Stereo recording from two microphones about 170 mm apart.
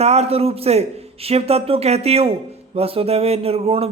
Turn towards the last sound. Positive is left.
turn(degrees=-35)  # may be behind; listen again after turning